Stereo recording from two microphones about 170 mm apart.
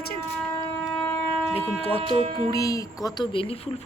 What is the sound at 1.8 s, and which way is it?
Speech, 35° left (ahead or behind).